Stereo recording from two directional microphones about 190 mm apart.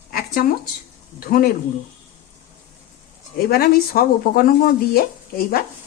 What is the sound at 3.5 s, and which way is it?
Speech, 50° left (ahead or behind).